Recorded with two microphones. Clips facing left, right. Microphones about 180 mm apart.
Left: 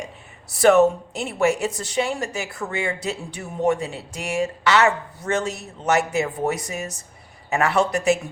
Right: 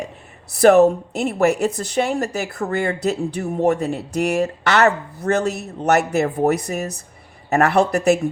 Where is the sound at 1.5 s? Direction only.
60° right (ahead or behind).